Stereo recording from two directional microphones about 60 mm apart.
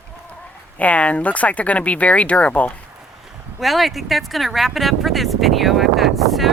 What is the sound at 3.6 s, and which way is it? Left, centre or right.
Speech, centre.